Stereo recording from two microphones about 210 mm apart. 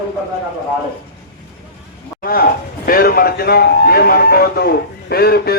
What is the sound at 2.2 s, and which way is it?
Speech, 45° left (ahead or behind).